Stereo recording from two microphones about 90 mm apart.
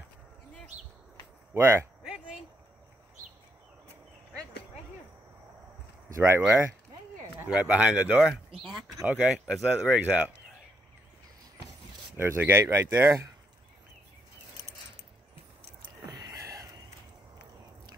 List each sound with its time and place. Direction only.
1.5 s speech: 30° right (ahead or behind)
6.1 s speech: 30° right (ahead or behind)
7.4 s speech: 15° right (ahead or behind)
9.8 s speech: 15° right (ahead or behind)
12.2 s speech: 25° right (ahead or behind)
16.1 s a sound: 40° right (ahead or behind)